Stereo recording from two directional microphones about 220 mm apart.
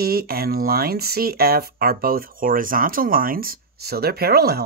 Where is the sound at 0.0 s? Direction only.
45° right (ahead or behind).